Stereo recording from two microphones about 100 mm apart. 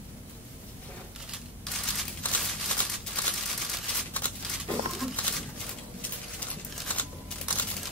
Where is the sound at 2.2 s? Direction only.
15° left (ahead or behind).